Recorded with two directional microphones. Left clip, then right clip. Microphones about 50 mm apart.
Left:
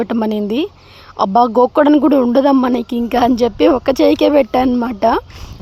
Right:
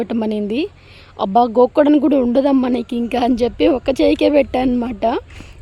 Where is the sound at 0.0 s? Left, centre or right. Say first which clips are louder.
Left 3 dB; centre.